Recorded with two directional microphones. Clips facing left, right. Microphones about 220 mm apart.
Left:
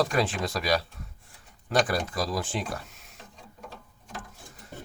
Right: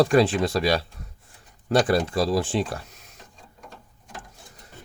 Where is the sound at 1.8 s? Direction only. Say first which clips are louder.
Right 7 dB; 30° right (ahead or behind).